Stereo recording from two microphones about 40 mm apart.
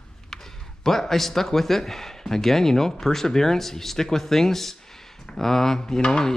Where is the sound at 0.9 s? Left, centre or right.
Centre.